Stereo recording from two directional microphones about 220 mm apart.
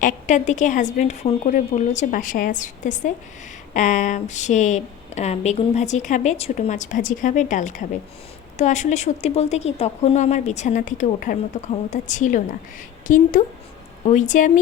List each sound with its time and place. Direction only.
0.0 s speech: 35° left (ahead or behind)